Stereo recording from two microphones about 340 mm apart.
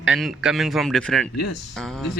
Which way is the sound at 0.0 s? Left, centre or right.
Centre.